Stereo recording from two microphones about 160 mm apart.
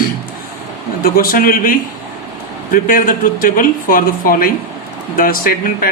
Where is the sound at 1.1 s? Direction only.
65° left (ahead or behind).